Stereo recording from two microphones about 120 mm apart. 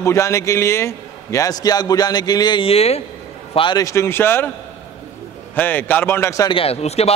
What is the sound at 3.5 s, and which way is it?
Speech, 45° left (ahead or behind).